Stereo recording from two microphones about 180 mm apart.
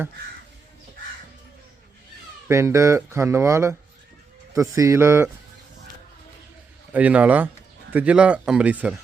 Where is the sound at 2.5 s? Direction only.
15° right (ahead or behind).